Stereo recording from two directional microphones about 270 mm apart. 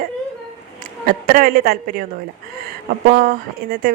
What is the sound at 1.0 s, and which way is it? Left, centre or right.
Speech, right.